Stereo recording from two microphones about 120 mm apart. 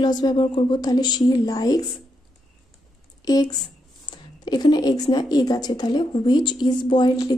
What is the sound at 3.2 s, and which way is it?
Speech, 30° left (ahead or behind).